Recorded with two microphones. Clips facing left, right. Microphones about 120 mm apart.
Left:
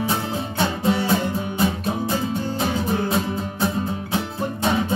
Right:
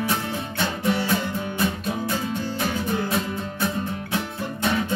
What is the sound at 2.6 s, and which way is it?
Music, 30° left (ahead or behind).